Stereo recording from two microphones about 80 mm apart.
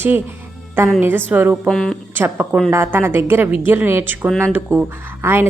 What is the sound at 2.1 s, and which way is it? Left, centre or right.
A woman's voice, right.